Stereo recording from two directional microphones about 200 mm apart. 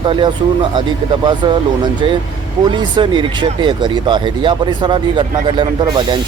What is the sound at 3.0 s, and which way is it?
Speech, 25° right (ahead or behind).